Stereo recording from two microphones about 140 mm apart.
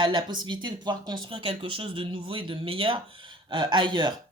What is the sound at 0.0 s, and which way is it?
Speech, 30° right (ahead or behind).